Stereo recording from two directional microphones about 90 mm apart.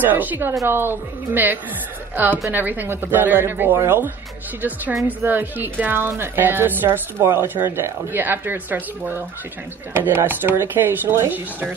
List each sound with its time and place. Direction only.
0.0 s a woman's voice: 20° right (ahead or behind)